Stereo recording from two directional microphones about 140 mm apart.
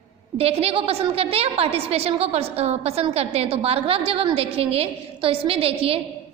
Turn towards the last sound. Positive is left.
turn(degrees=-45)  # may be behind; listen again after turning